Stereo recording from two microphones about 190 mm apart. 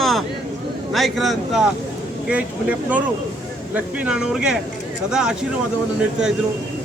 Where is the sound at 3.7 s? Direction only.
5° right (ahead or behind).